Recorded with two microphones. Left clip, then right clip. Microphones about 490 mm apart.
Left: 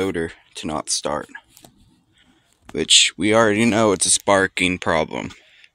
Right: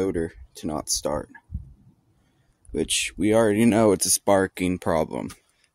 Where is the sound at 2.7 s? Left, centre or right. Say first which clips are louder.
Left 11 dB; right.